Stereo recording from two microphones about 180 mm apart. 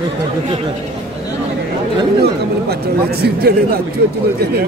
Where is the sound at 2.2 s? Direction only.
60° right (ahead or behind).